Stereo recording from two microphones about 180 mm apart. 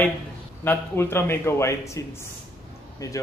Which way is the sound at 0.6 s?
10° left (ahead or behind).